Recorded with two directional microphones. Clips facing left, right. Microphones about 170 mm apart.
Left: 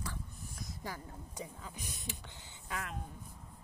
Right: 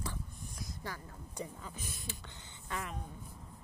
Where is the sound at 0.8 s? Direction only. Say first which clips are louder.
Left 2 dB; 15° left (ahead or behind).